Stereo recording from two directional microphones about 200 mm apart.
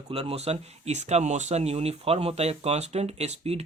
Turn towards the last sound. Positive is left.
turn(degrees=-30)  # may be behind; listen again after turning